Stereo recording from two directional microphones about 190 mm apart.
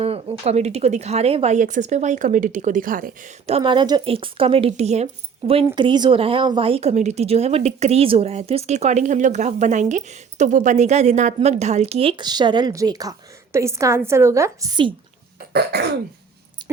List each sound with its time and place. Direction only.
0.0 s speech: 30° right (ahead or behind)
3.4 s speech: 30° right (ahead or behind)
15.4 s cough: 60° right (ahead or behind)
16.6 s keys jangling: 25° right (ahead or behind)